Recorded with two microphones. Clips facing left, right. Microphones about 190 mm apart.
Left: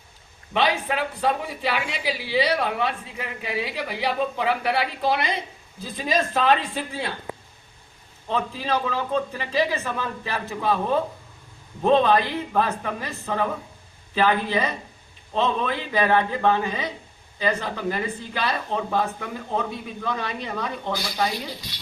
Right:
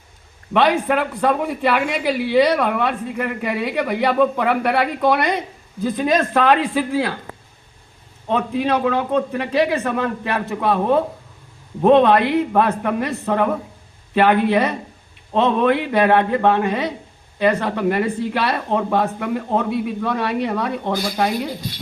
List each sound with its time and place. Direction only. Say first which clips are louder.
0.5 s a man's voice: right 7 dB; 55° right (ahead or behind)
8.3 s a man's voice: right 6 dB; 65° right (ahead or behind)